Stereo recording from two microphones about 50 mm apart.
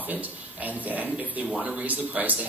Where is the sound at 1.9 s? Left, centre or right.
Right.